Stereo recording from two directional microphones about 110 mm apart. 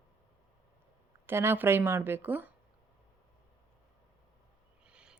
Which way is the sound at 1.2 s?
20° right (ahead or behind).